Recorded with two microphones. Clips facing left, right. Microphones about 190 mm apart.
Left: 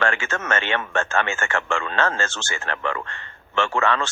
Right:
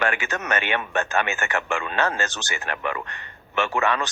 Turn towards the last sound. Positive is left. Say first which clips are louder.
# left 1 dB
turn(degrees=-15)  # may be behind; listen again after turning